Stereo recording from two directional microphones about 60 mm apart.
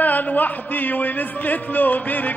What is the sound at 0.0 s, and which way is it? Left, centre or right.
A man's voice, left.